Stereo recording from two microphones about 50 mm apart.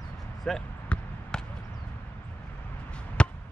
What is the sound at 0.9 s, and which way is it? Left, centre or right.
Basketball bounce, centre.